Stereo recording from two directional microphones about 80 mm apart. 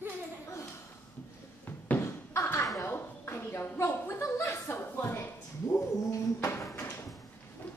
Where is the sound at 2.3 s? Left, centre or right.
Left.